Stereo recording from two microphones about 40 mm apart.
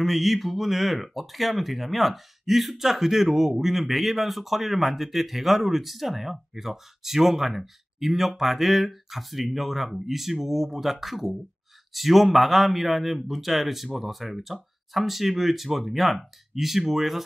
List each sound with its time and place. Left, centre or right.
0.0 s speech: centre